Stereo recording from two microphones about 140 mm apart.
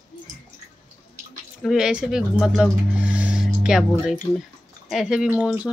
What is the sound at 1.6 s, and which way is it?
Speech, 5° right (ahead or behind).